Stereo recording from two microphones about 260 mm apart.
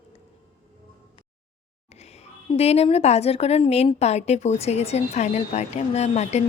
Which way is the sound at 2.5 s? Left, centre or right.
Left.